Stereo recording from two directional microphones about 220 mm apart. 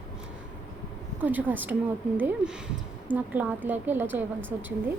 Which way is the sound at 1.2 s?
10° right (ahead or behind).